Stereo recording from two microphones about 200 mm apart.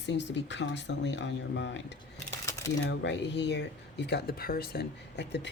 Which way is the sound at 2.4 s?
15° left (ahead or behind).